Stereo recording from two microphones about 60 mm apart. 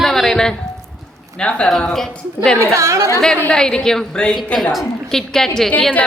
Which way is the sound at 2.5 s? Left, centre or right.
Right.